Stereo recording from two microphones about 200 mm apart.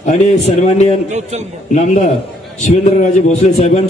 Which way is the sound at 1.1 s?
35° right (ahead or behind).